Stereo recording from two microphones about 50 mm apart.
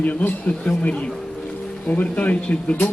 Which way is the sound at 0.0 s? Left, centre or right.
Left.